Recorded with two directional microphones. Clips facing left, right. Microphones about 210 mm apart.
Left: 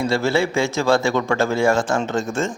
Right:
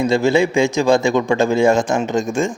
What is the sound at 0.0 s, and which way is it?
A man's voice, 15° right (ahead or behind).